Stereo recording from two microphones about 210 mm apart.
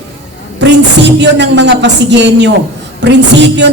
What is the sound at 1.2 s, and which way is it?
Speech, 55° right (ahead or behind).